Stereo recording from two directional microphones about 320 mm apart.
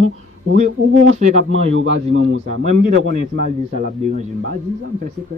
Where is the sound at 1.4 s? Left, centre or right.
Right.